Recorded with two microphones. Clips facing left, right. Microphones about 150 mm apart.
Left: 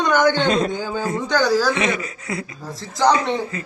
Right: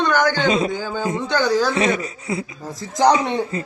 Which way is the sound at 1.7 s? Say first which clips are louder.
Right 2 dB; 35° right (ahead or behind).